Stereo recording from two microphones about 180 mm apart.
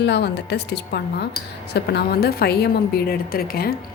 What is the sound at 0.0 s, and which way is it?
A woman's voice, 70° left (ahead or behind).